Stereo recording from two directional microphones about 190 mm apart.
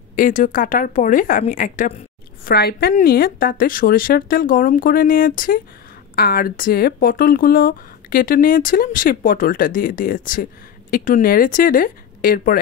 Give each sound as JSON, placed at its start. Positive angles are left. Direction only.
{"t": 0.1, "sound": "speech", "side_deg": 45}